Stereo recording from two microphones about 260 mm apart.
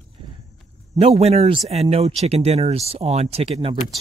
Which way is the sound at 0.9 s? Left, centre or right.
Right.